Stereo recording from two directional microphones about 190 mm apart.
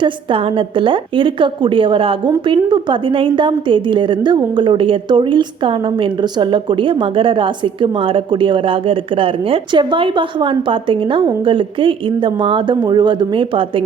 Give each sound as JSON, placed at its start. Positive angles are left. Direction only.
{"t": 0.0, "sound": "a woman's voice", "side_deg": -25}